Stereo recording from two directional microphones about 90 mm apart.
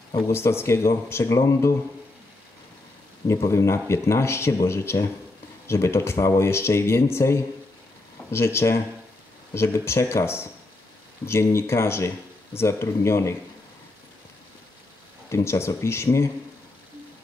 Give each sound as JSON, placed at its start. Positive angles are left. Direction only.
{"t": 0.3, "sound": "speech", "side_deg": 30}
{"t": 3.4, "sound": "speech", "side_deg": 30}
{"t": 15.2, "sound": "speech", "side_deg": 30}